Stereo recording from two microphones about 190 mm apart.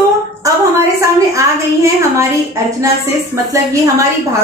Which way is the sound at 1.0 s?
15° right (ahead or behind).